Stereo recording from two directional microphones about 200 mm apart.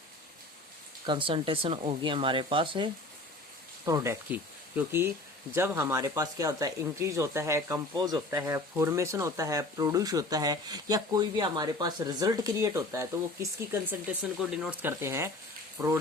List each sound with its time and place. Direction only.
1.0 s speech: 25° right (ahead or behind)